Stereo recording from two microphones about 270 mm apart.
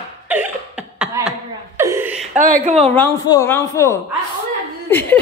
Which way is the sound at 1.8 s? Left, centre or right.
Centre.